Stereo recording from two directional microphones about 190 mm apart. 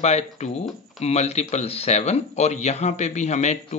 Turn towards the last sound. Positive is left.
turn(degrees=35)  # may be behind; listen again after turning